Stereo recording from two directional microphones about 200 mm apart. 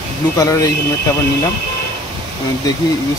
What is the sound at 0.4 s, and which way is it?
Speech, 15° left (ahead or behind).